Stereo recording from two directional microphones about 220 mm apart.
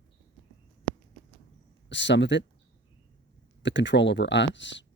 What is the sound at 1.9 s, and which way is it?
Speech, 55° left (ahead or behind).